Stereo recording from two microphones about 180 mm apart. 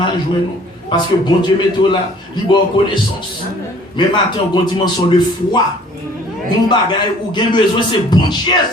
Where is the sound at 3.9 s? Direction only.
25° left (ahead or behind).